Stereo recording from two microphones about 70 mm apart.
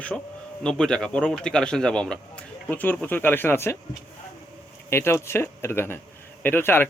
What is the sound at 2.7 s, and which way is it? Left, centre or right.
Speech, left.